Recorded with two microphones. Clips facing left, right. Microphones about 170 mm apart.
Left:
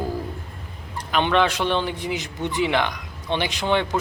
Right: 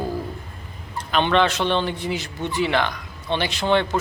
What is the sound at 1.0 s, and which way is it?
A man's voice, 10° left (ahead or behind).